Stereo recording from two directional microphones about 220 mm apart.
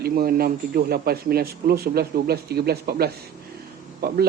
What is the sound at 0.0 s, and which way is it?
Speech, 45° right (ahead or behind).